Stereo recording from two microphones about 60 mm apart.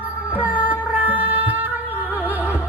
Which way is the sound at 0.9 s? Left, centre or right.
Right.